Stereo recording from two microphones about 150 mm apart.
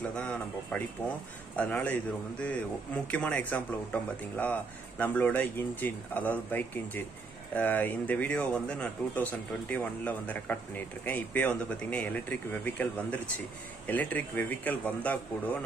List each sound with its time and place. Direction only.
0.1 s speech: 5° left (ahead or behind)